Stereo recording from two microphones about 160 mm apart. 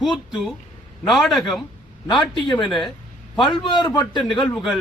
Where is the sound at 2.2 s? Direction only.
30° left (ahead or behind).